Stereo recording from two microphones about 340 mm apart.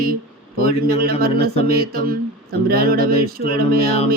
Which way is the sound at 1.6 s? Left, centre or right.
Right.